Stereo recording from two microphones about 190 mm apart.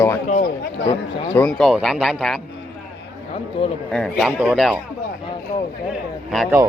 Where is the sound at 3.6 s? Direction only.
25° left (ahead or behind).